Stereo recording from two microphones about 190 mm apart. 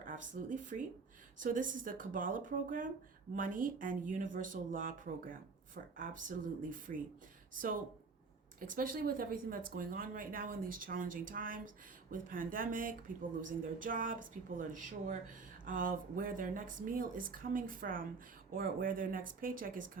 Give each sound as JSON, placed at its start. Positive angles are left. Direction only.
{"t": 0.0, "sound": "speech", "side_deg": -45}
{"t": 8.7, "sound": "speech", "side_deg": -45}